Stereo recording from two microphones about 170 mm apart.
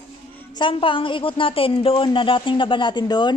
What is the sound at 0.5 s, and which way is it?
A woman's voice, 30° left (ahead or behind).